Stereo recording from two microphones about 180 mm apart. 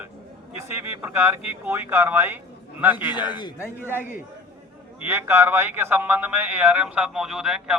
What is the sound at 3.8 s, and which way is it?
Speech, 10° right (ahead or behind).